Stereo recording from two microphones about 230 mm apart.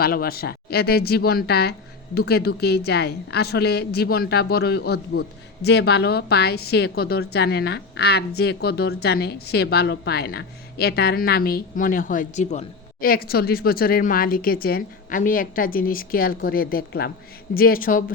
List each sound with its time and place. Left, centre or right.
0.0 s a woman's voice: left